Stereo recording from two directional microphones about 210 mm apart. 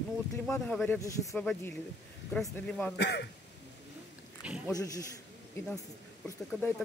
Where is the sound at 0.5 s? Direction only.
10° left (ahead or behind).